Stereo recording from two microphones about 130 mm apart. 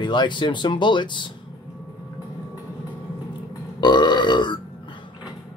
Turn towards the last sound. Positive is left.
turn(degrees=35)  # may be behind; listen again after turning